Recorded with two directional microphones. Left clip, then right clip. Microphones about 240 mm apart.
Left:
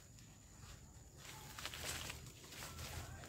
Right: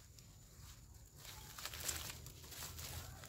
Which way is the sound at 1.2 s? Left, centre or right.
Right.